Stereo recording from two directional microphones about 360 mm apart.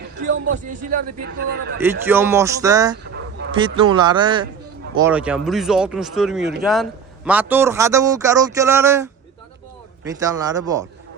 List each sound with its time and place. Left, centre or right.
0.2 s a man's voice: right
1.8 s speech: centre